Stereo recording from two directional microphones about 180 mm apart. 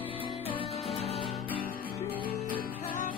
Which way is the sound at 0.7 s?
Centre (ahead or behind).